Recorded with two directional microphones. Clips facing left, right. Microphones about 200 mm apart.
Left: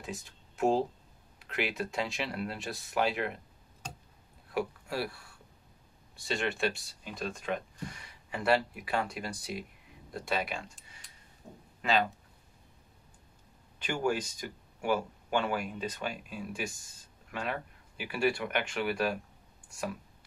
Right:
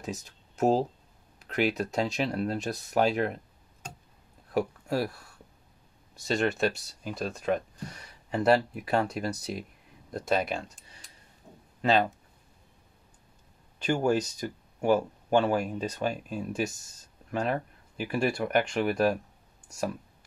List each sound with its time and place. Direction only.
0.0 s speech: 40° right (ahead or behind)
4.6 s speech: 40° right (ahead or behind)
6.1 s speech: 40° right (ahead or behind)
13.7 s speech: 40° right (ahead or behind)